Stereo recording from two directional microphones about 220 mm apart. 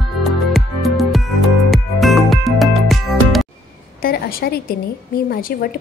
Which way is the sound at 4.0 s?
45° left (ahead or behind).